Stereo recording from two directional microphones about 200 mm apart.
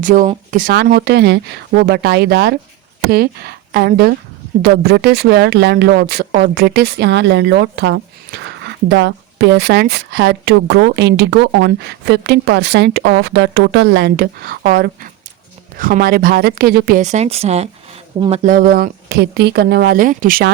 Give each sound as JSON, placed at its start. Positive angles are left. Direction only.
{"t": 0.0, "sound": "speech", "side_deg": -40}
{"t": 18.4, "sound": "speech", "side_deg": -45}